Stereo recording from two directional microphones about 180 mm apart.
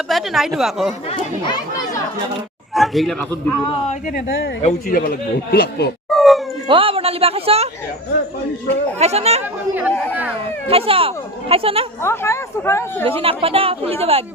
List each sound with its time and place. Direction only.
0.1 s a man's voice: centre (ahead or behind)
2.7 s a man's voice: centre (ahead or behind)
4.9 s a man's voice: 55° left (ahead or behind)
6.1 s howl: centre (ahead or behind)
6.7 s speech: 30° right (ahead or behind)
9.0 s speech: 35° right (ahead or behind)
10.1 s speech: 10° right (ahead or behind)
10.7 s speech: 30° right (ahead or behind)
12.0 s speech: 15° left (ahead or behind)
13.1 s speech: 30° right (ahead or behind)